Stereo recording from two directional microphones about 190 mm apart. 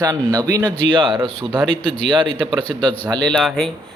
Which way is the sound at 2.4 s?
25° right (ahead or behind).